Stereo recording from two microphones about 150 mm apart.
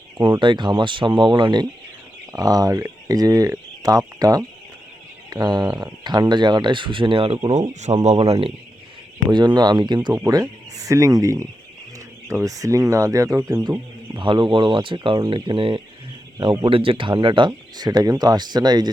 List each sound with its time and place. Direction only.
0.2 s speech: 30° right (ahead or behind)
7.7 s speech: 50° right (ahead or behind)
9.3 s speech: 30° right (ahead or behind)